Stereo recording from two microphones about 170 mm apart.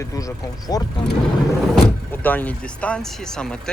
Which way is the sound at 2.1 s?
10° left (ahead or behind).